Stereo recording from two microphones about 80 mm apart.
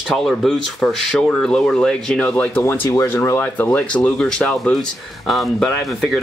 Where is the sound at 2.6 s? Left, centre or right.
Left.